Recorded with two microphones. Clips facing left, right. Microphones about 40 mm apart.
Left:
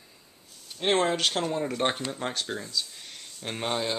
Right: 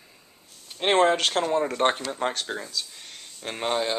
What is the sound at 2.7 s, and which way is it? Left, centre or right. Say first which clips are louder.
Speech: left 1 dB; centre.